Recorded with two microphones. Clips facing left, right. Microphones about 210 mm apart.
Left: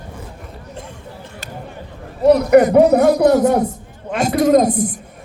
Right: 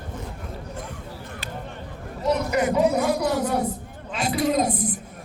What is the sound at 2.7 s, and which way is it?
Speech, 65° left (ahead or behind).